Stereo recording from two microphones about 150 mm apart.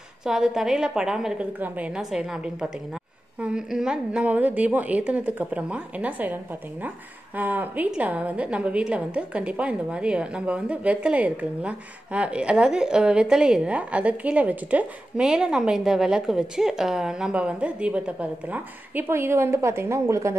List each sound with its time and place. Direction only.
0.2 s a woman's voice: 5° right (ahead or behind); by 20.3 s 20° right (ahead or behind)